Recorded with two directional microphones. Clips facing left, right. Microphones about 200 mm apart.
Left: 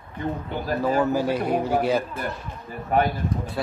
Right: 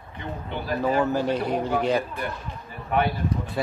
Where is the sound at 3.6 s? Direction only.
Centre (ahead or behind).